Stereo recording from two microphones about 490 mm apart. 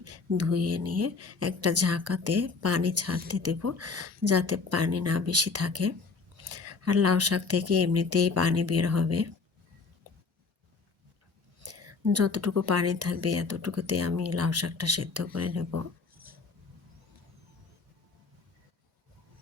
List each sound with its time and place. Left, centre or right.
0.0 s speech: right
11.6 s speech: right